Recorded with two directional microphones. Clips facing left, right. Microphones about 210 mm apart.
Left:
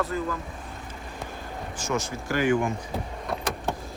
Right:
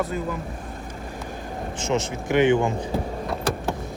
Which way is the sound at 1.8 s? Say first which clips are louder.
Right 4 dB; 25° right (ahead or behind).